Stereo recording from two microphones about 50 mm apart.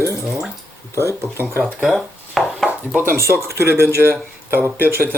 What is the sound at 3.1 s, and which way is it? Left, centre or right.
Speech, right.